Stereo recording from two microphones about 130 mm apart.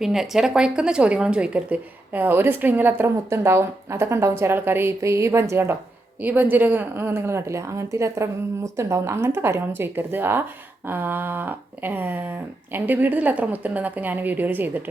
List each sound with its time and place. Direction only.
0.0 s a woman's voice: 5° right (ahead or behind)